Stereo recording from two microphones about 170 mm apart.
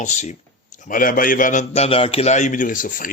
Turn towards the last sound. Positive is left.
turn(degrees=50)  # may be behind; listen again after turning